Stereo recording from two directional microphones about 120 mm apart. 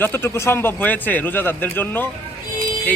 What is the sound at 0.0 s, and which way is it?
A man's voice, 20° left (ahead or behind).